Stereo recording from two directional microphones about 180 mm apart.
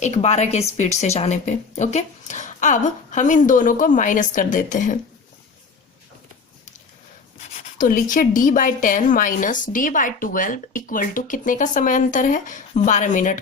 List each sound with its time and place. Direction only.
0.0 s a woman's voice: 40° left (ahead or behind)
7.8 s a woman's voice: 50° left (ahead or behind)